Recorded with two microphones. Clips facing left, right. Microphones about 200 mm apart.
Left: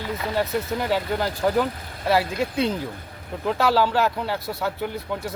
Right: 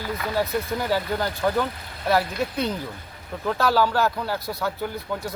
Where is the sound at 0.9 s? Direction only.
Centre (ahead or behind).